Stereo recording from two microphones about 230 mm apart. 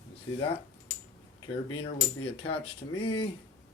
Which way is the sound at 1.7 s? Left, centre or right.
Left.